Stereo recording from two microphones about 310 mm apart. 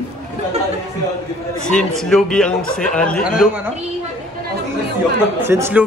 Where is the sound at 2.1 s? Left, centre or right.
Centre.